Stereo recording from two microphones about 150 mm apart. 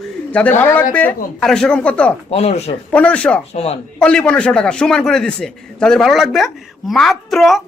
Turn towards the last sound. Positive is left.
turn(degrees=0)  # may be behind; listen again after turning